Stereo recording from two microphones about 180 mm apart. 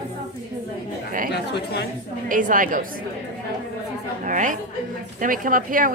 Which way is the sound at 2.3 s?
45° right (ahead or behind).